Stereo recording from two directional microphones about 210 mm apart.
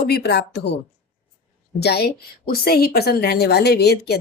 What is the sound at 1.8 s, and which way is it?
A woman's voice, 50° left (ahead or behind).